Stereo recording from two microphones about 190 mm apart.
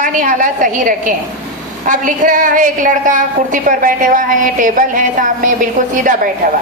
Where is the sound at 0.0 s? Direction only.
40° right (ahead or behind).